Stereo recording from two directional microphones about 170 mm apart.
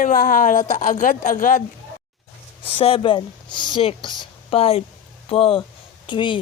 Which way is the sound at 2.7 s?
35° left (ahead or behind).